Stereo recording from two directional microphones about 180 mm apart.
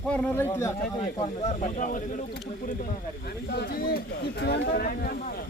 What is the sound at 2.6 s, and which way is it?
Speech, 60° left (ahead or behind).